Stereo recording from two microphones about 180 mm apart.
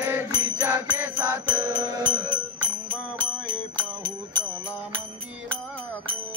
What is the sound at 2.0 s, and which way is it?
Music, 10° left (ahead or behind).